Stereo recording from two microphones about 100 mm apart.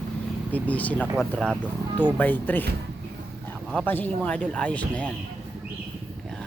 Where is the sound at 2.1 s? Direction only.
20° left (ahead or behind).